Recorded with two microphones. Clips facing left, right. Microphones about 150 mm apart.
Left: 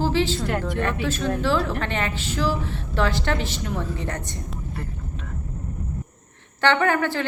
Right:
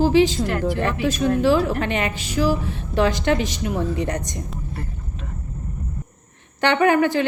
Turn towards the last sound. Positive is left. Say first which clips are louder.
# right 5 dB
turn(degrees=-15)  # may be behind; listen again after turning